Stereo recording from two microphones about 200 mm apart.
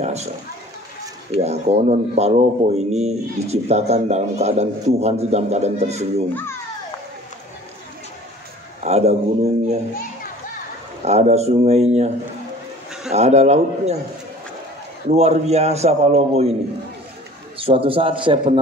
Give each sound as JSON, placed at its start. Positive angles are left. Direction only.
{"t": 0.0, "sound": "speech", "side_deg": -35}
{"t": 1.4, "sound": "a man's voice", "side_deg": -35}
{"t": 8.8, "sound": "a man's voice", "side_deg": -30}
{"t": 11.0, "sound": "a man's voice", "side_deg": -35}
{"t": 13.1, "sound": "a man's voice", "side_deg": -35}
{"t": 15.0, "sound": "a man's voice", "side_deg": -35}
{"t": 17.6, "sound": "a man's voice", "side_deg": -25}